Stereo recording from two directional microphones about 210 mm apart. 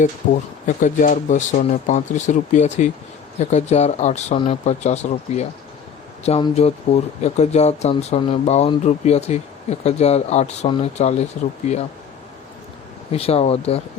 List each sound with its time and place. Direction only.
0.2 s speech: 40° left (ahead or behind)
13.1 s speech: 30° left (ahead or behind)